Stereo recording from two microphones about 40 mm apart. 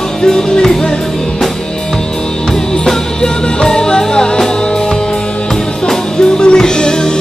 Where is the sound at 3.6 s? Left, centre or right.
Centre.